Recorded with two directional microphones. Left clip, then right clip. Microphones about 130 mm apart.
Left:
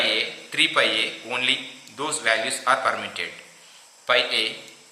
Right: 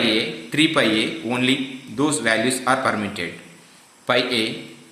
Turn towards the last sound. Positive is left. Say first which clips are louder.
# right 1 dB
turn(degrees=-35)  # may be behind; listen again after turning